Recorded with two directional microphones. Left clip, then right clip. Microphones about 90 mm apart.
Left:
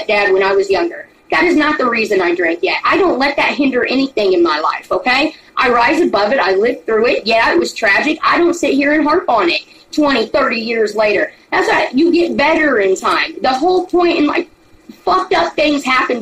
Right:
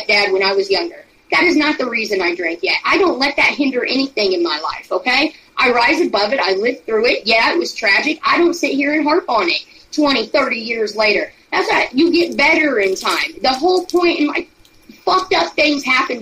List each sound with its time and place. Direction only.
0.0 s a woman's voice: 20° left (ahead or behind)